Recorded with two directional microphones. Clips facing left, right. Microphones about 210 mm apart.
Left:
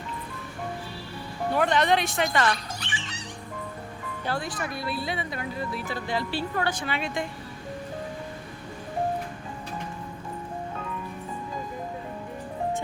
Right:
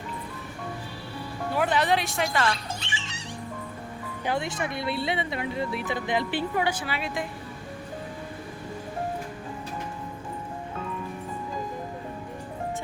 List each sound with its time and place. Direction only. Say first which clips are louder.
1.5 s a woman's voice: left 1 dB; 5° right (ahead or behind)
2.5 s music: left 1 dB; 25° right (ahead or behind)
4.3 s speech: right 2 dB; 25° right (ahead or behind); by 7.3 s 5° right (ahead or behind)